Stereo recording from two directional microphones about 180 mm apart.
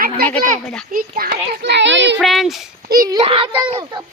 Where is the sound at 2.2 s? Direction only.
Centre (ahead or behind).